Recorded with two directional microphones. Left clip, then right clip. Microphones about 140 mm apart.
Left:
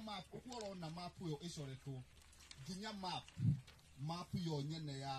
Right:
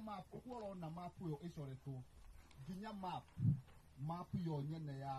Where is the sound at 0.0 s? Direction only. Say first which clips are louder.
Left 1 dB; centre (ahead or behind).